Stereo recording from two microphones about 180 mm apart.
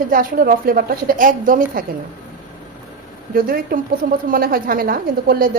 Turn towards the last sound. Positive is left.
turn(degrees=-55)  # may be behind; listen again after turning